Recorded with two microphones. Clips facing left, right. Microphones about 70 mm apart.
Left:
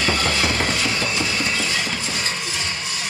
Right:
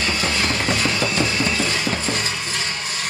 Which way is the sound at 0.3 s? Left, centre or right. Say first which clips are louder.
Even; right.